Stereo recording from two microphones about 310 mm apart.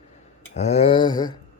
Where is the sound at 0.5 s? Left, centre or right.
Centre.